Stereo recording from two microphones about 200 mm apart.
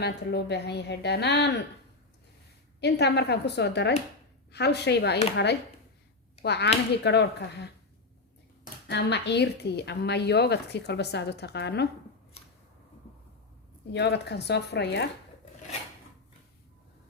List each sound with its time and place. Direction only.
0.0 s a woman's voice: 55° left (ahead or behind)
2.8 s a woman's voice: 55° left (ahead or behind)
6.4 s a woman's voice: 55° left (ahead or behind)
8.9 s a woman's voice: 60° left (ahead or behind)
13.9 s a woman's voice: 55° left (ahead or behind)